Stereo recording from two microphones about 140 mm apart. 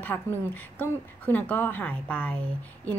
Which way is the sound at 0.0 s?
15° left (ahead or behind).